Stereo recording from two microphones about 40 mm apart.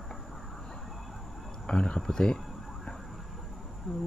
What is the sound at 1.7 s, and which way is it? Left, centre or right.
Speech, left.